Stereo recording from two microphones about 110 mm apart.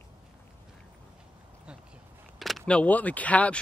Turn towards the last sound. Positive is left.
turn(degrees=15)  # may be behind; listen again after turning